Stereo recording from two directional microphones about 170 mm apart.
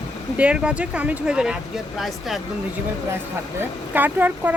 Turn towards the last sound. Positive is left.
turn(degrees=-10)  # may be behind; listen again after turning